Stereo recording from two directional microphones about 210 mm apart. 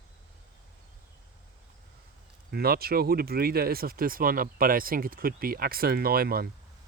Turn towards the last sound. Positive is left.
turn(degrees=-45)  # may be behind; listen again after turning